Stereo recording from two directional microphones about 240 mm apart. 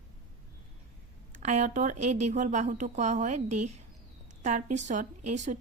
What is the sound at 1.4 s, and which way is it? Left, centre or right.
A woman's voice, right.